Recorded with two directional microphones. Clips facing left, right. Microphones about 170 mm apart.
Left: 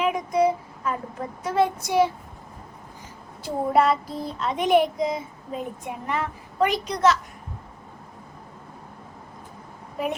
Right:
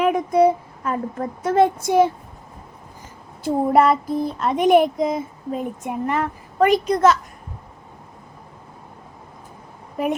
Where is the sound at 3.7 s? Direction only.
50° right (ahead or behind).